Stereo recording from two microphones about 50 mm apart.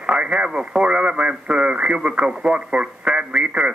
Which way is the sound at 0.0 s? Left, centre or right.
Centre.